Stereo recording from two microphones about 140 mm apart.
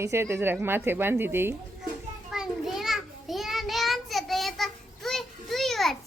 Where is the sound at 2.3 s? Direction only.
5° right (ahead or behind).